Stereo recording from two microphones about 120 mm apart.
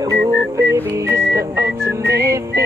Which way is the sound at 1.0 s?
25° right (ahead or behind).